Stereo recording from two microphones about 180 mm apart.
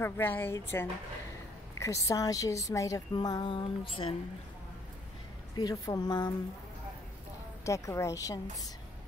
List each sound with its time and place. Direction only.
0.0 s a woman's voice: 10° left (ahead or behind); by 4.1 s 30° left (ahead or behind)
5.6 s a woman's voice: 20° left (ahead or behind)
7.6 s a woman's voice: 15° left (ahead or behind)